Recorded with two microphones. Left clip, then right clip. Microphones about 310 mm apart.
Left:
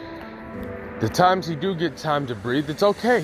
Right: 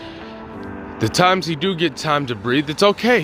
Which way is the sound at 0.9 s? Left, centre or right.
Centre.